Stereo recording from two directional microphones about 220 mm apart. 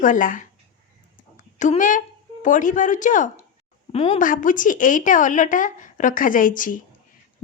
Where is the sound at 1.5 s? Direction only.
35° left (ahead or behind).